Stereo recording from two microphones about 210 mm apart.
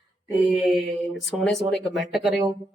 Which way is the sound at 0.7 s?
Centre (ahead or behind).